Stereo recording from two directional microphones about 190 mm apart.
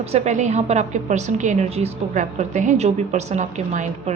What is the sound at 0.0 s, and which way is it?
A woman's voice, 35° right (ahead or behind).